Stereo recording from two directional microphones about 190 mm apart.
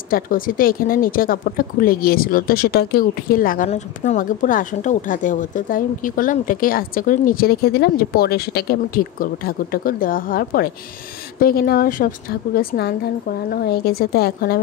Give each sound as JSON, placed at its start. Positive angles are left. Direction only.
{"t": 0.1, "sound": "a woman's voice", "side_deg": 50}